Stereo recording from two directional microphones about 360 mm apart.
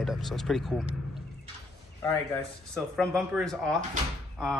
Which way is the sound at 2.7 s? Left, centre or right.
Centre.